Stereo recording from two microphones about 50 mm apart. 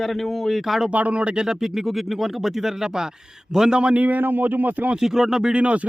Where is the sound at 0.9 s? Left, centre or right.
Right; by 3.8 s centre.